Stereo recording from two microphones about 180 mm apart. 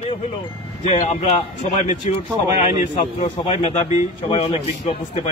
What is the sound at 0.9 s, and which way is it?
A man's voice, 40° left (ahead or behind).